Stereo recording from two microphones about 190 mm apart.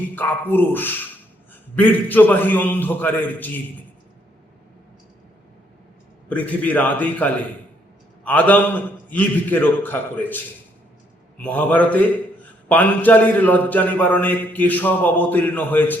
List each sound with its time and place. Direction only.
0.2 s a man's voice: 10° left (ahead or behind)
6.2 s a man's voice: 10° left (ahead or behind)
11.4 s a man's voice: 10° left (ahead or behind)